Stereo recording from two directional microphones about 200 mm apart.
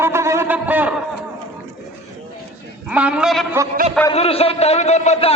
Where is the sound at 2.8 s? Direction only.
5° right (ahead or behind).